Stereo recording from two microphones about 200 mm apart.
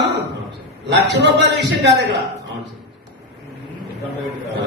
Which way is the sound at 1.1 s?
60° right (ahead or behind).